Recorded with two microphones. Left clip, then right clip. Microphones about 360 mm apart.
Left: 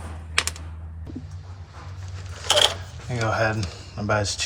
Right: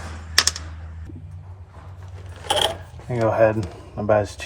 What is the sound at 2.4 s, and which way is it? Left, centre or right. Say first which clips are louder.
Coin: left 2 dB; centre.